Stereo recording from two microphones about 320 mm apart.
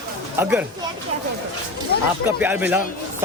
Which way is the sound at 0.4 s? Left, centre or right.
Centre.